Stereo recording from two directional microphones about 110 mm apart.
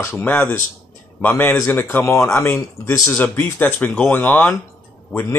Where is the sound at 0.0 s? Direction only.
20° left (ahead or behind).